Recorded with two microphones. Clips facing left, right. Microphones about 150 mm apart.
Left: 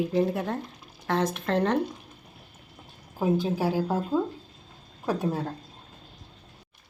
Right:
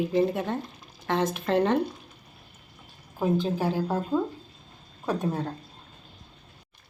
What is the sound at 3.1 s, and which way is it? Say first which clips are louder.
Speech: even; 10° left (ahead or behind).